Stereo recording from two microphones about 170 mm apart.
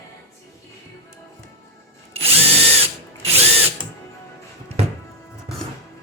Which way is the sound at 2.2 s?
35° right (ahead or behind).